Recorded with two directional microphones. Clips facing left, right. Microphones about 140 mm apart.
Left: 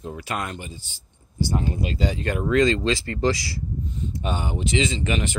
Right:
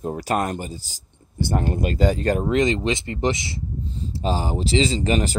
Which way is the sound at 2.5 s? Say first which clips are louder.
Left 4 dB; 20° right (ahead or behind).